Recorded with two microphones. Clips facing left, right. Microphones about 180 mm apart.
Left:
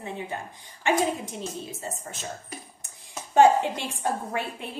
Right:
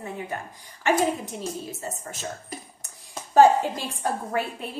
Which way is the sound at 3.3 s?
20° left (ahead or behind).